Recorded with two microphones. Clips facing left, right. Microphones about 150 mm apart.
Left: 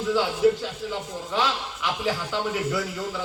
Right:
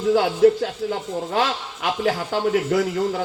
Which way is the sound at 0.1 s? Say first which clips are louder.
Right 5 dB; 55° right (ahead or behind).